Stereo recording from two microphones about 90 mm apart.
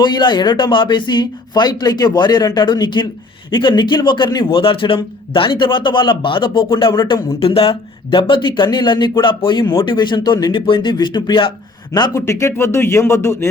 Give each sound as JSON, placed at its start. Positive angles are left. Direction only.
{"t": 0.0, "sound": "a man's voice", "side_deg": 55}
{"t": 6.9, "sound": "speech", "side_deg": 60}
{"t": 7.3, "sound": "speech", "side_deg": 90}
{"t": 10.5, "sound": "speech", "side_deg": 65}
{"t": 12.1, "sound": "speech", "side_deg": 30}